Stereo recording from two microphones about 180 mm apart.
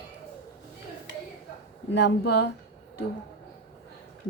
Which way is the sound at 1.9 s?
65° left (ahead or behind).